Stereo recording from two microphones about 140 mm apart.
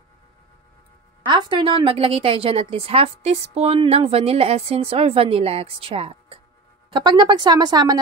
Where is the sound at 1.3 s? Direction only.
30° right (ahead or behind).